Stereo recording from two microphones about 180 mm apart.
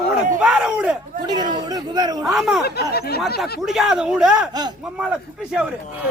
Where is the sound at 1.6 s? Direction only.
20° right (ahead or behind).